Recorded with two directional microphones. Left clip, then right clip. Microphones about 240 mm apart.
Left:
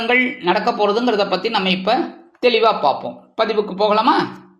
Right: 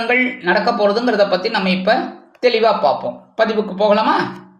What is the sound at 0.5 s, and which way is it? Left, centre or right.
A woman's voice, centre.